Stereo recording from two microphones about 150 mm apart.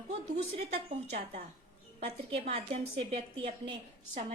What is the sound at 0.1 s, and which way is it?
Speech, 45° right (ahead or behind).